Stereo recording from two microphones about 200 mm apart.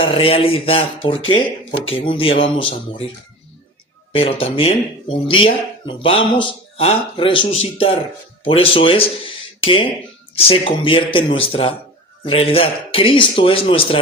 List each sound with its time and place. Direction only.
0.0 s speech: 25° left (ahead or behind)
4.1 s speech: 25° left (ahead or behind)